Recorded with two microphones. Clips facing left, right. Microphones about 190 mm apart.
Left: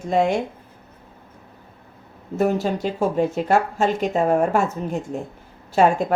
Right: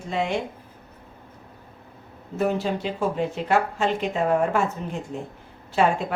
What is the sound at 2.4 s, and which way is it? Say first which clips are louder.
Speech: left 3 dB; 45° left (ahead or behind).